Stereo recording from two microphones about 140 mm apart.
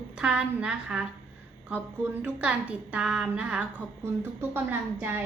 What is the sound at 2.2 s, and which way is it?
A woman's voice, 10° right (ahead or behind).